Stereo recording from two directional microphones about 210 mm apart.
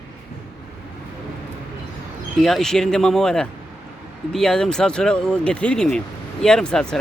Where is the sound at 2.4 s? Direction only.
Centre (ahead or behind).